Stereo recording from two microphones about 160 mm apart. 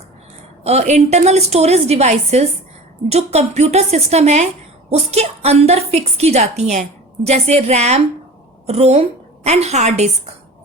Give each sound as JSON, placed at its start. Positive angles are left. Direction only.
{"t": 0.6, "sound": "a woman's voice", "side_deg": -40}